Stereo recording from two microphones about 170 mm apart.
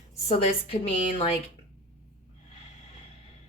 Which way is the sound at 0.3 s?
35° left (ahead or behind).